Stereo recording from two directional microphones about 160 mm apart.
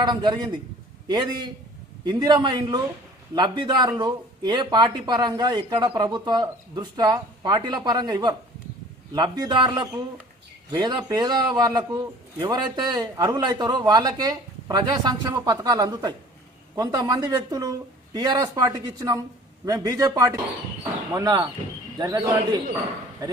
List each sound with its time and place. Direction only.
0.0 s a man's voice: 30° right (ahead or behind)